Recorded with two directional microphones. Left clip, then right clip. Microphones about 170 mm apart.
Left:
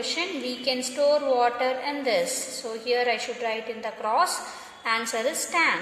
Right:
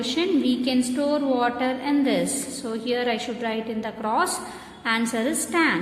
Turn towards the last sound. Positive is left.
turn(degrees=15)  # may be behind; listen again after turning